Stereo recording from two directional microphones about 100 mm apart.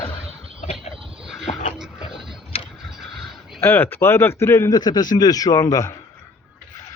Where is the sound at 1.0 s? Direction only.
65° right (ahead or behind).